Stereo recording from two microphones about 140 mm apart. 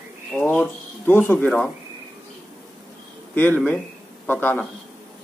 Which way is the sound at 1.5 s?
5° left (ahead or behind).